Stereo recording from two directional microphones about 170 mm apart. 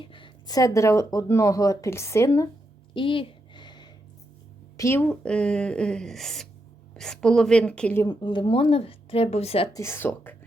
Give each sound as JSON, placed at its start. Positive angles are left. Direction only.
{"t": 0.0, "sound": "speech", "side_deg": 30}
{"t": 2.9, "sound": "a sound", "side_deg": 30}
{"t": 4.8, "sound": "speech", "side_deg": 10}
{"t": 8.0, "sound": "speech", "side_deg": 25}
{"t": 9.7, "sound": "speech", "side_deg": 15}